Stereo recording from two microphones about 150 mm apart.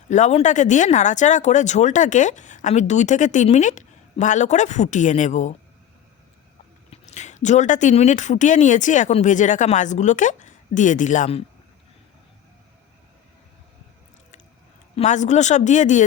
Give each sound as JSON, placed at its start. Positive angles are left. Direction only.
{"t": 0.1, "sound": "speech", "side_deg": 50}
{"t": 6.9, "sound": "speech", "side_deg": 50}
{"t": 14.9, "sound": "speech", "side_deg": 55}